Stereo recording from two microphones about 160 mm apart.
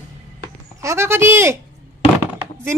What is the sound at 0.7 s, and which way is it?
Speech, 15° right (ahead or behind).